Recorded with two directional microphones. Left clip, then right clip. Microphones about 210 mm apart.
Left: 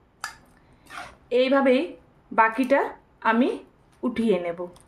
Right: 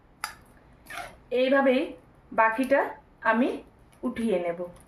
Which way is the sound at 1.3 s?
45° left (ahead or behind).